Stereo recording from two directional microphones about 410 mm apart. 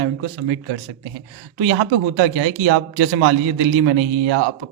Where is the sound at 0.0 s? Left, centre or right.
Right.